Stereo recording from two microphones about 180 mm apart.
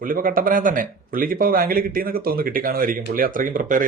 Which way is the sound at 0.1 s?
50° right (ahead or behind).